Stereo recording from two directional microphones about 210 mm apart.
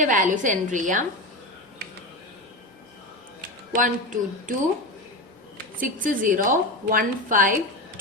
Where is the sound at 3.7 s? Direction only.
40° right (ahead or behind).